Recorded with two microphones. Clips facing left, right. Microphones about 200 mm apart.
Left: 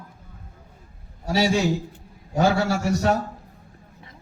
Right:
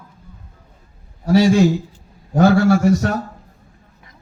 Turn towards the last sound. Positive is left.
turn(degrees=-55)  # may be behind; listen again after turning